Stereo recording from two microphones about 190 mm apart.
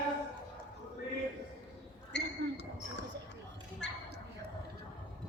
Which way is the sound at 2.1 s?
65° left (ahead or behind).